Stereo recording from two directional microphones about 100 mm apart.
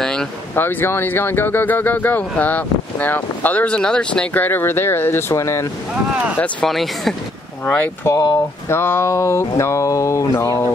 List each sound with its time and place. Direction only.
0.0 s vehicle: 5° left (ahead or behind)
0.6 s speech: 20° left (ahead or behind)
6.6 s speech: centre (ahead or behind)
7.6 s speech: 25° left (ahead or behind)
9.6 s a sound: 30° left (ahead or behind)